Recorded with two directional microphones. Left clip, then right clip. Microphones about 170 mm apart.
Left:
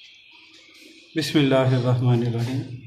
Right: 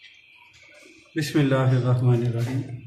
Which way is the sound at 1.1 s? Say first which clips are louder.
Left 3 dB; 45° left (ahead or behind).